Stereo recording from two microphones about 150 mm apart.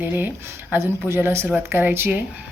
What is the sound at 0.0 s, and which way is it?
Speech, 15° right (ahead or behind).